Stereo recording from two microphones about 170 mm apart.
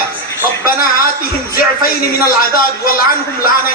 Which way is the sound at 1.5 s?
60° left (ahead or behind).